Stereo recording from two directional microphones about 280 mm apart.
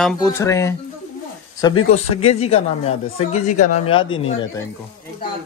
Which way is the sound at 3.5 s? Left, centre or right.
Left.